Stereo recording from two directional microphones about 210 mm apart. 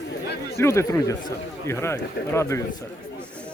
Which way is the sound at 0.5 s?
15° left (ahead or behind).